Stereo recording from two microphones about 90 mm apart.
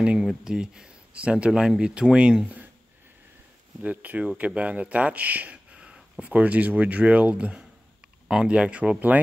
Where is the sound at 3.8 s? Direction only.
15° right (ahead or behind).